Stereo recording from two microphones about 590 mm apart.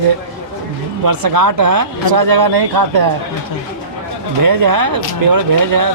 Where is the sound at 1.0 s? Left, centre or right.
Right.